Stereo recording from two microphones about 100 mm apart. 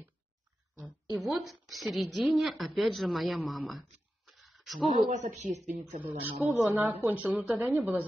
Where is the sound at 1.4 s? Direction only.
Centre (ahead or behind).